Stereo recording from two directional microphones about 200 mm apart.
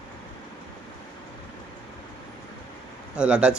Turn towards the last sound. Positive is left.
turn(degrees=-5)  # may be behind; listen again after turning